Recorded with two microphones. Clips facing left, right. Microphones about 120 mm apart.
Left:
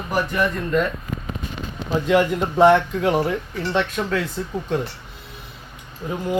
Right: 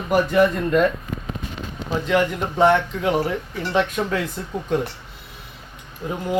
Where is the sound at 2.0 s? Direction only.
5° left (ahead or behind).